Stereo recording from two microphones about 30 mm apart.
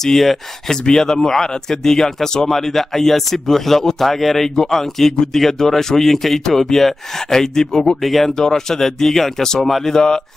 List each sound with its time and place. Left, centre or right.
0.0 s speech: centre
4.6 s speech: centre
8.0 s speech: centre
8.4 s speech: centre
9.9 s speech: left